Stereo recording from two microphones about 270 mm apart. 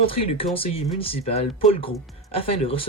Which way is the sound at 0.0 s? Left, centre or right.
Left.